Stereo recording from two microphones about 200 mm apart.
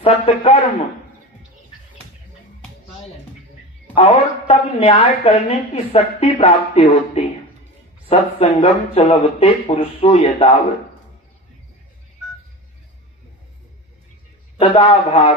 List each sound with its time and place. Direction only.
0.0 s speech: 30° left (ahead or behind)
3.9 s a woman's voice: 30° left (ahead or behind)
14.6 s speech: 25° left (ahead or behind)